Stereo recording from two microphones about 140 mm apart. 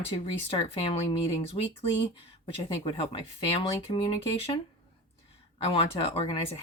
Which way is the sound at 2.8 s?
40° left (ahead or behind).